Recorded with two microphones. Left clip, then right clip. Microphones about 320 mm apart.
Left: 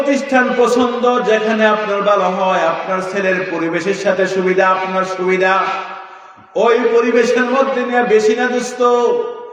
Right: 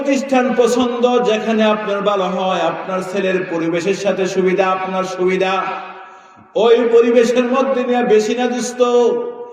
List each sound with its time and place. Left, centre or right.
0.1 s a man's voice: centre
4.0 s a man's voice: centre
6.6 s a man's voice: centre